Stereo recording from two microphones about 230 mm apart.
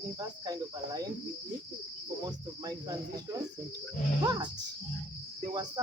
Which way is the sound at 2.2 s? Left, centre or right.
Centre.